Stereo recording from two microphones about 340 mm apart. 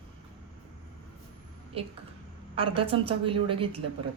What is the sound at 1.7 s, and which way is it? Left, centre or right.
A woman's voice, centre.